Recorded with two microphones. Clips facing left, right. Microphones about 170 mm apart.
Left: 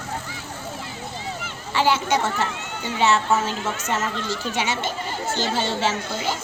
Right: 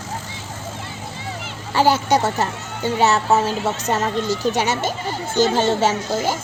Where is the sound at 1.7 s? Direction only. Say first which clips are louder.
Right 4 dB; 40° right (ahead or behind).